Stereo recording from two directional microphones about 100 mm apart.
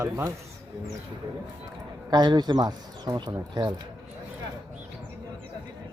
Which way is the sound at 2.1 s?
45° right (ahead or behind).